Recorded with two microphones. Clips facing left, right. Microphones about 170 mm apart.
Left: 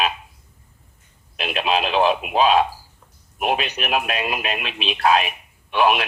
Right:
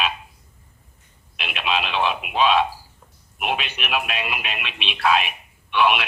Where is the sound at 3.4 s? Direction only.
40° left (ahead or behind).